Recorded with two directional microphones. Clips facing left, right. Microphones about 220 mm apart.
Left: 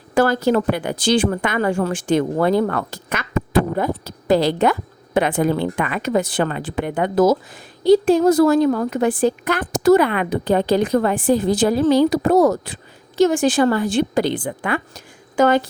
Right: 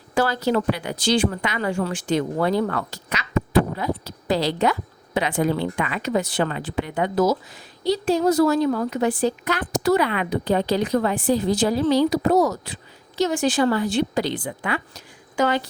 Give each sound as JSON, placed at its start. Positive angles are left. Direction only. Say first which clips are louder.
{"t": 0.1, "sound": "speech", "louder": "left 5 dB", "side_deg": 50}